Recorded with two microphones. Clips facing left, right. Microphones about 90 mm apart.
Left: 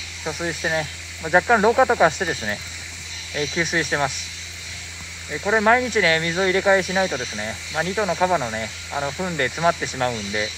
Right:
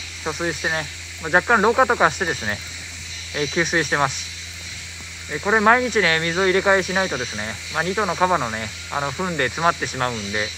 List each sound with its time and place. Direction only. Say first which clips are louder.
0.2 s speech: right 1 dB; 20° right (ahead or behind)
5.3 s speech: right 1 dB; 25° right (ahead or behind)